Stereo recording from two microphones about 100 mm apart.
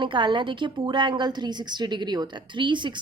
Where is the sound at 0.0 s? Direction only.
55° right (ahead or behind).